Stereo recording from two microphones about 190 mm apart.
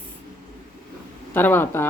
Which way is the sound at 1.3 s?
10° left (ahead or behind).